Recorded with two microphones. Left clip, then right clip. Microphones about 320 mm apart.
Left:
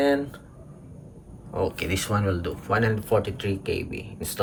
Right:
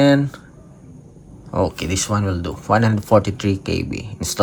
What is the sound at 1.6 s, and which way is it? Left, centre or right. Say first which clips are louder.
Speech: right 1 dB; centre.